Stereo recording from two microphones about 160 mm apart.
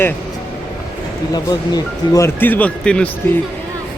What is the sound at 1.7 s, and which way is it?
Speech, 20° left (ahead or behind).